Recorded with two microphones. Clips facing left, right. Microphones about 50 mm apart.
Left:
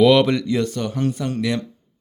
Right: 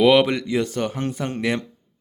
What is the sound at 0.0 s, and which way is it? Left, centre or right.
Speech, centre.